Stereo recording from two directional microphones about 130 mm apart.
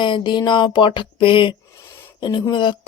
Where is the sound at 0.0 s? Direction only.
35° left (ahead or behind).